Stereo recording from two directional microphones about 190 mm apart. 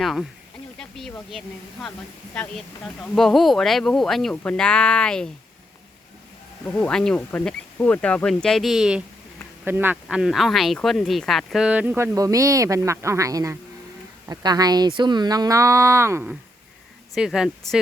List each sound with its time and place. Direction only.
0.0 s speech: centre (ahead or behind)
0.8 s snake: centre (ahead or behind)
1.3 s speech: centre (ahead or behind)
6.7 s speech: 5° left (ahead or behind); by 16.3 s 15° right (ahead or behind)
17.2 s speech: 5° right (ahead or behind)